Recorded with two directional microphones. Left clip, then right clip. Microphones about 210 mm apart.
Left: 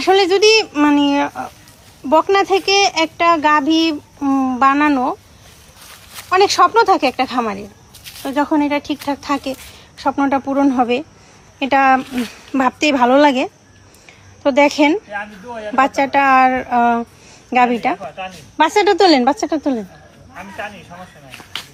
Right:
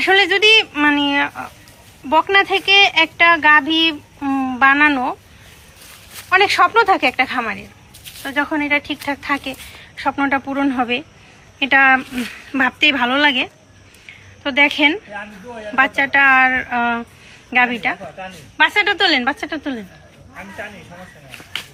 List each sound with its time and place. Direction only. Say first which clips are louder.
0.0 s speech: left 1 dB; 15° left (ahead or behind)
6.2 s speech: left 1 dB; 15° left (ahead or behind)
15.1 s speech: left 4 dB; 30° left (ahead or behind)
15.7 s a woman's voice: left 1 dB; 15° left (ahead or behind)